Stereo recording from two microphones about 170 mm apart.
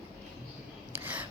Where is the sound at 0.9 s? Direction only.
10° right (ahead or behind).